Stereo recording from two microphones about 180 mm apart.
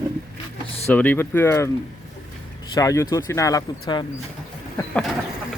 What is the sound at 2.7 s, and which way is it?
Speech, 20° left (ahead or behind).